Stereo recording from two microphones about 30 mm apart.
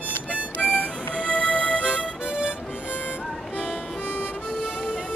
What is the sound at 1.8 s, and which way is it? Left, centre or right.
Music, right.